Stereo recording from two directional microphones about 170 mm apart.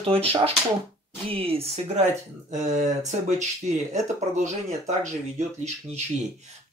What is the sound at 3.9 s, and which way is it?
Speech, 45° right (ahead or behind).